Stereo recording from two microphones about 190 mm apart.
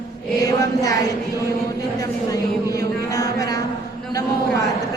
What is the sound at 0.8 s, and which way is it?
Speech, 20° left (ahead or behind).